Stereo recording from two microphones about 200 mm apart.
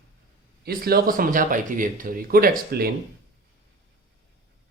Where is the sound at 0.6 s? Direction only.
50° right (ahead or behind).